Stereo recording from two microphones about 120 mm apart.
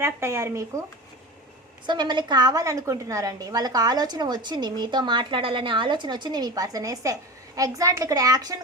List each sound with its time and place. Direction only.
0.0 s speech: 20° right (ahead or behind)
1.9 s a woman's voice: 40° right (ahead or behind)